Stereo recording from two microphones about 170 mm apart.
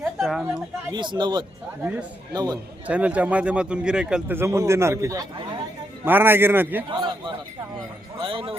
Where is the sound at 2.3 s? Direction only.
25° right (ahead or behind).